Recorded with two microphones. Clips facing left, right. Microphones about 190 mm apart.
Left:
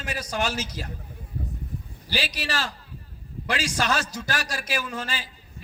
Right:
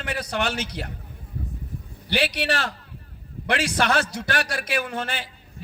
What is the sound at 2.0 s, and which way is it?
A man's voice, 60° right (ahead or behind).